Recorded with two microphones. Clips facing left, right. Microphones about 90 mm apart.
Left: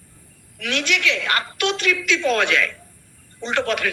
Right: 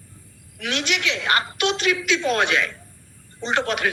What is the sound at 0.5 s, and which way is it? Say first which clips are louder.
A man's voice: left 2 dB; 20° right (ahead or behind).